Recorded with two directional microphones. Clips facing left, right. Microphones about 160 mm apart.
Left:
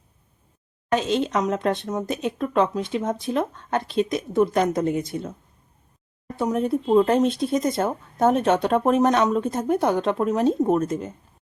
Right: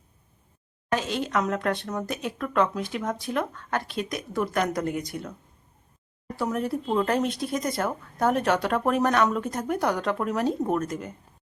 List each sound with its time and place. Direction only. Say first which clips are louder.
0.9 s speech: left 5 dB; 20° left (ahead or behind)
6.3 s speech: left 5 dB; 20° left (ahead or behind)